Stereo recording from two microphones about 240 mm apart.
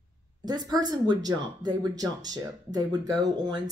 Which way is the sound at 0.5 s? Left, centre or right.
Centre.